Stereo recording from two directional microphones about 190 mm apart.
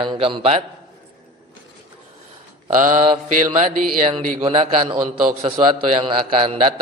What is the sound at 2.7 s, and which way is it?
Speech, 45° right (ahead or behind).